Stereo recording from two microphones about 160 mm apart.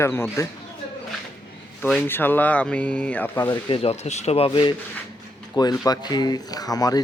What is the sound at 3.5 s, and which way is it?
Speech, 30° left (ahead or behind).